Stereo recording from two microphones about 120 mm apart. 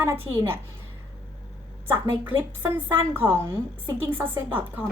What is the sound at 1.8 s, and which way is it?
A woman's voice, 20° right (ahead or behind).